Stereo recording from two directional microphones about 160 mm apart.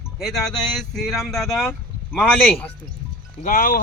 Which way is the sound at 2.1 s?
10° left (ahead or behind).